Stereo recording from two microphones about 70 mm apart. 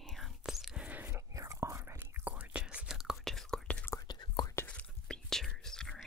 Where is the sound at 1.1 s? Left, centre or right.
Right.